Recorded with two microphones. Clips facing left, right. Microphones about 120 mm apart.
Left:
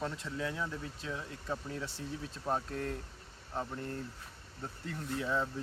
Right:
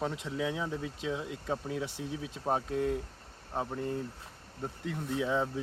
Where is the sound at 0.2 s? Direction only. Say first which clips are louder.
Right 4 dB; 15° right (ahead or behind).